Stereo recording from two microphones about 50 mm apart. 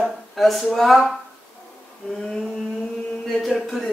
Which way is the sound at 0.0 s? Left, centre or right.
Centre.